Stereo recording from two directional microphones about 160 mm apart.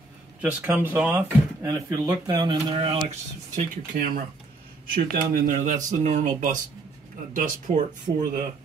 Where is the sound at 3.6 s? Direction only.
60° right (ahead or behind).